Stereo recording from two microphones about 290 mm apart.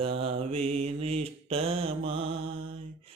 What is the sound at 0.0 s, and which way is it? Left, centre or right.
Mantra, centre.